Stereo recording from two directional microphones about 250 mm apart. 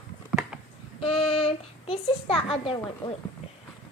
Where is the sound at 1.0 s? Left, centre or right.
Left.